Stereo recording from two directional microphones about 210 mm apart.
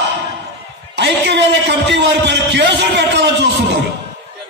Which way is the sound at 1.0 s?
55° right (ahead or behind).